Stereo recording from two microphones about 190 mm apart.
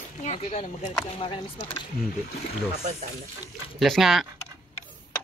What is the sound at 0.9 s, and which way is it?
Speech, 25° left (ahead or behind).